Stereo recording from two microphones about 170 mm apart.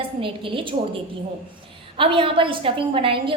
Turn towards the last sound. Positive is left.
turn(degrees=-30)  # may be behind; listen again after turning